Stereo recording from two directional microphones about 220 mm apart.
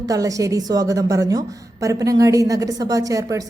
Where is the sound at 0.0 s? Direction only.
15° right (ahead or behind).